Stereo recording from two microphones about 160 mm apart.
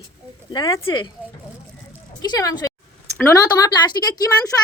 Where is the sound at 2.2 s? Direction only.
25° left (ahead or behind).